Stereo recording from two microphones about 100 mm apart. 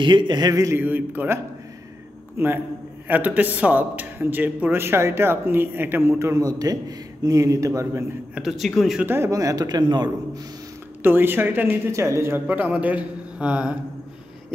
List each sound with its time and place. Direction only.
0.0 s speech: 50° right (ahead or behind)
0.7 s a man's voice: 20° right (ahead or behind)
8.4 s speech: centre (ahead or behind)
9.0 s a man's voice: 25° right (ahead or behind); by 10.4 s 45° right (ahead or behind)
11.0 s a man's voice: 20° right (ahead or behind)